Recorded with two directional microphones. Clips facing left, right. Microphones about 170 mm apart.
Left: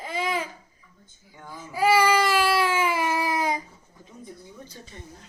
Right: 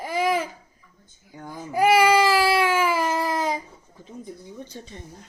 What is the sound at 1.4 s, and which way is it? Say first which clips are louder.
Babbling: right 4 dB; 50° right (ahead or behind).